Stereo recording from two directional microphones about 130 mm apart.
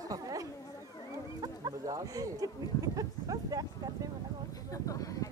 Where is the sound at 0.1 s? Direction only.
25° right (ahead or behind).